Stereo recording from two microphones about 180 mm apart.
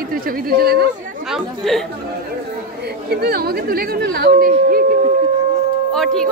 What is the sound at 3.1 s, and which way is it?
Speech, 60° right (ahead or behind).